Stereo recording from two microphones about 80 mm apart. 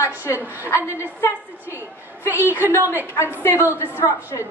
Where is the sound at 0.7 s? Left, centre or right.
Left.